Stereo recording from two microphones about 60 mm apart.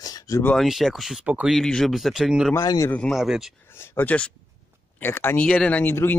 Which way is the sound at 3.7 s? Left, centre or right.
Left.